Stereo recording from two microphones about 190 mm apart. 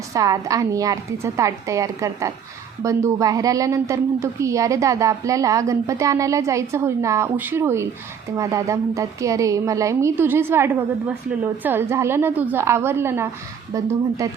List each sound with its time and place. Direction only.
0.1 s a woman's voice: 15° right (ahead or behind)